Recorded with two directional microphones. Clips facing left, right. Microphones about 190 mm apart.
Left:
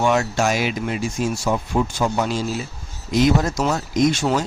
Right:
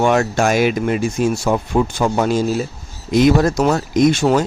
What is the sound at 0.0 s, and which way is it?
A man's voice, 55° right (ahead or behind).